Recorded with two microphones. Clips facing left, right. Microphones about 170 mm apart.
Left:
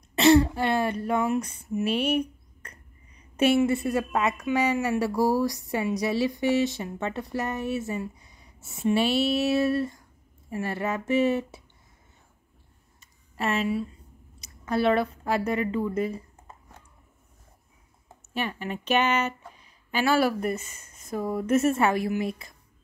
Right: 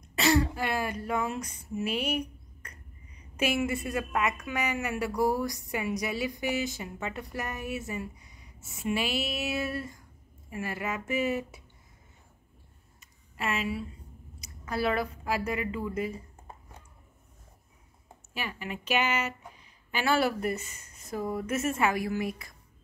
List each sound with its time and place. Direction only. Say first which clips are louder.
0.2 s a woman's voice: left 7 dB; 25° left (ahead or behind)
13.4 s a woman's voice: left 5 dB; 25° left (ahead or behind)
18.9 s a woman's voice: left 5 dB; 10° right (ahead or behind)
20.3 s a woman's voice: left 3 dB; 25° left (ahead or behind)